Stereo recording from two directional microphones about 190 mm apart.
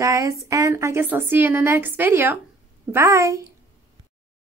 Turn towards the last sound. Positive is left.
turn(degrees=-15)  # may be behind; listen again after turning